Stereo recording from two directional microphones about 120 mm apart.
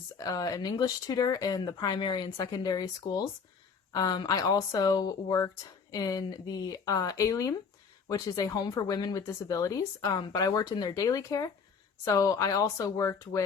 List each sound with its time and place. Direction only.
0.2 s speech: 30° left (ahead or behind)